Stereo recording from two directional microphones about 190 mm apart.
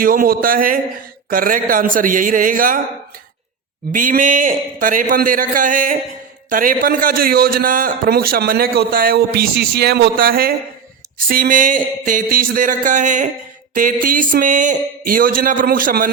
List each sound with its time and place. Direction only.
0.0 s a man's voice: 50° right (ahead or behind)
3.9 s a man's voice: 45° right (ahead or behind)